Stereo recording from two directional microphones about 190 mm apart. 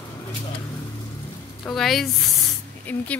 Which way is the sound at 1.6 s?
Centre (ahead or behind).